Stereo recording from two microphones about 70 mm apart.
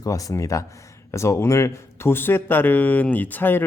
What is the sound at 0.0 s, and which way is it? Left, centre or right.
A man's voice, left.